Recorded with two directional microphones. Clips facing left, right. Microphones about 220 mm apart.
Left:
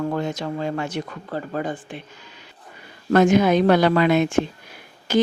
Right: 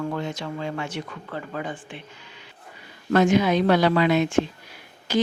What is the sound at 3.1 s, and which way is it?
Speech, 45° left (ahead or behind).